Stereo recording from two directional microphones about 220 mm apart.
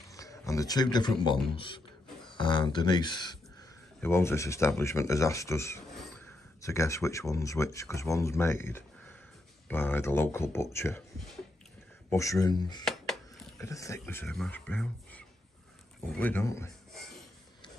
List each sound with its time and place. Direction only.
0.1 s speech: 15° left (ahead or behind)
12.1 s speech: 15° left (ahead or behind)
12.8 s music: centre (ahead or behind)
13.6 s speech: 15° left (ahead or behind)